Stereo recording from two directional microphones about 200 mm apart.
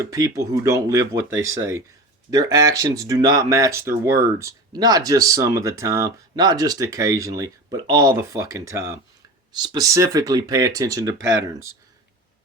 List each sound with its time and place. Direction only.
0.0 s speech: 15° right (ahead or behind)
1.3 s speech: 70° right (ahead or behind)
1.5 s speech: 15° right (ahead or behind)
11.2 s speech: 65° right (ahead or behind)